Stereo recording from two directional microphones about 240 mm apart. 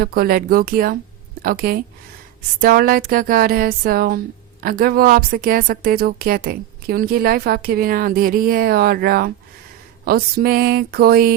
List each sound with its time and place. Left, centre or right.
0.0 s a woman's voice: right